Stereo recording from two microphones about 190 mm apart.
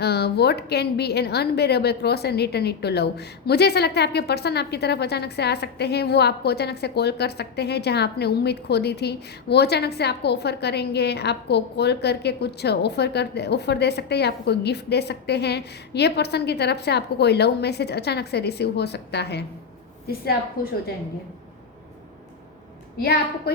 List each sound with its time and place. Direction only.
0.0 s a woman's voice: 60° left (ahead or behind)
20.6 s a woman's voice: 50° left (ahead or behind)